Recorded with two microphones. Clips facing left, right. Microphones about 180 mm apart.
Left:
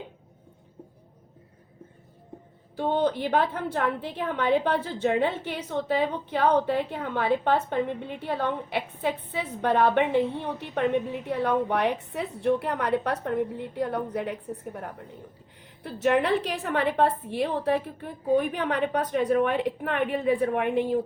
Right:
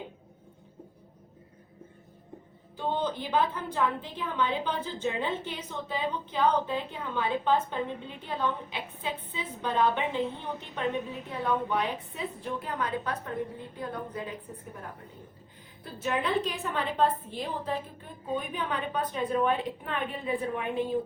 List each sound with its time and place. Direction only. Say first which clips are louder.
2.7 s a woman's voice: left 6 dB; 65° left (ahead or behind)
11.3 s a woman's voice: left 4 dB; 70° left (ahead or behind)